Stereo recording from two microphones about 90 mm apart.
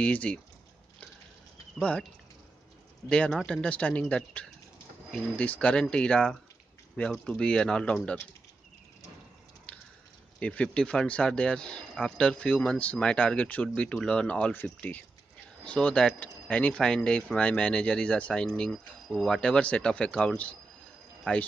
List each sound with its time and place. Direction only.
0.0 s speech: 15° left (ahead or behind)
1.8 s speech: 10° left (ahead or behind)
3.1 s speech: 10° left (ahead or behind)
10.4 s speech: 15° left (ahead or behind)